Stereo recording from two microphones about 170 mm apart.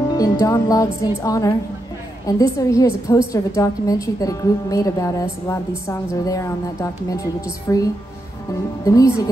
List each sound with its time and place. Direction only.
0.1 s a woman's voice: 20° left (ahead or behind)